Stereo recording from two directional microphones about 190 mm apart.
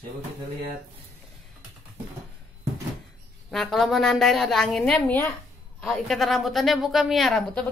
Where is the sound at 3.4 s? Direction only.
Centre (ahead or behind).